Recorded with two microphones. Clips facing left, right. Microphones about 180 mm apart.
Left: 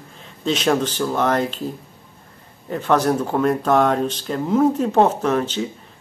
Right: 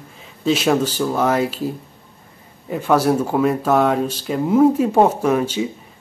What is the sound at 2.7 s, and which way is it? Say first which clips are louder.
Speech: right 2 dB; 10° right (ahead or behind).